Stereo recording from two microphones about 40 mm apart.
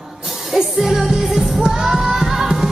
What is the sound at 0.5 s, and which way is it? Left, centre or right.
Music, centre.